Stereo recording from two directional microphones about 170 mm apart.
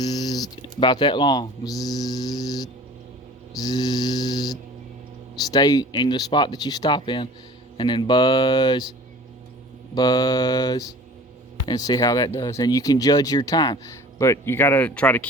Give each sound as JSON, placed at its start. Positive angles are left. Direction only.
{"t": 0.0, "sound": "a sound", "side_deg": 25}
{"t": 3.6, "sound": "speech", "side_deg": 25}
{"t": 9.9, "sound": "speech", "side_deg": 25}